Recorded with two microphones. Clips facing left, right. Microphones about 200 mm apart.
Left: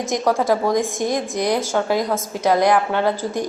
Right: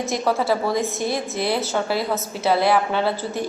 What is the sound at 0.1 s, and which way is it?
A woman's voice, 15° left (ahead or behind).